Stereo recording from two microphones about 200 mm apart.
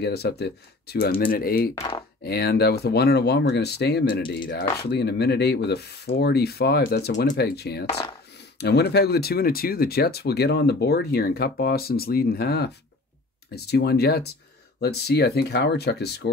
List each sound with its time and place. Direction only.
0.0 s speech: 55° left (ahead or behind)